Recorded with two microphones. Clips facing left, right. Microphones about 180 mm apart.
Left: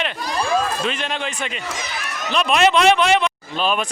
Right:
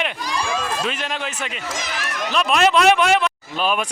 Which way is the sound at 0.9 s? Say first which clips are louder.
Left 1 dB; 5° right (ahead or behind).